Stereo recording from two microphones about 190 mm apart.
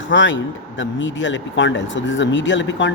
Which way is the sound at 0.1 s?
80° left.